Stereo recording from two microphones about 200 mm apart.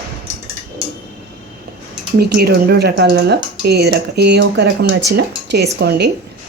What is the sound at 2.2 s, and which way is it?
A woman's voice, 50° right (ahead or behind).